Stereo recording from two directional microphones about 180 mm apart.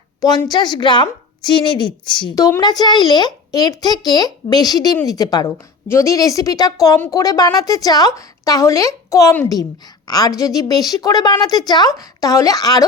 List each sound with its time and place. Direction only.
0.2 s a woman's voice: 20° left (ahead or behind)